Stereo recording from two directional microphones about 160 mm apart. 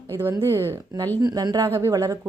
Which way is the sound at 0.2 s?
15° right (ahead or behind).